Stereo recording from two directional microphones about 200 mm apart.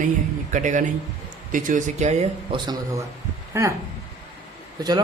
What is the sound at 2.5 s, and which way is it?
Speech, 20° right (ahead or behind).